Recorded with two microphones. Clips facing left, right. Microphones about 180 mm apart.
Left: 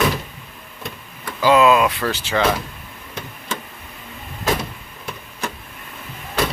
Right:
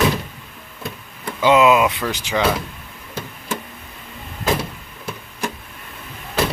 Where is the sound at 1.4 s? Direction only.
20° right (ahead or behind).